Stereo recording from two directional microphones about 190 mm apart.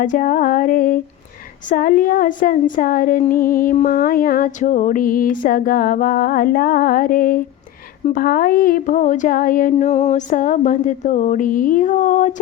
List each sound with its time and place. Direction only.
0.0 s speech: 45° left (ahead or behind)